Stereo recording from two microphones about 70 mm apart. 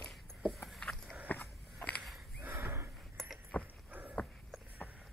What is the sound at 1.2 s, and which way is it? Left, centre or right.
Biting, left.